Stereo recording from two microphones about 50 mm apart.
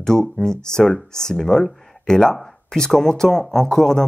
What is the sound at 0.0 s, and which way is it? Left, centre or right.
Speech, centre.